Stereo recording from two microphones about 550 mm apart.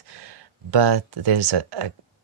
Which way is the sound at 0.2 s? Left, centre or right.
Right.